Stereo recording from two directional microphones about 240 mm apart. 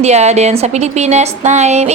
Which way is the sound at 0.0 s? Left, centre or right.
Right.